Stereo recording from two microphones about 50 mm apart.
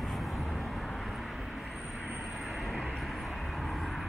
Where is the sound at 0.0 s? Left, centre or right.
Centre.